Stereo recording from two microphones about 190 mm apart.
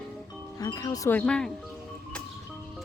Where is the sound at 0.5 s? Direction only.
20° left (ahead or behind).